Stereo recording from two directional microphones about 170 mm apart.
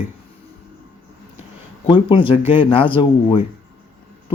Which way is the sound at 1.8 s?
30° left (ahead or behind).